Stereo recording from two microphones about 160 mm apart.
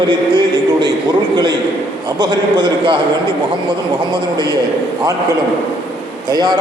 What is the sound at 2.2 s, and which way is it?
Speech, 30° right (ahead or behind).